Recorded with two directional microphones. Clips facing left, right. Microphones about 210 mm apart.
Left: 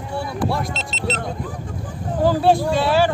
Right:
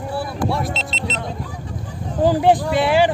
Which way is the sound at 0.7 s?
50° left (ahead or behind).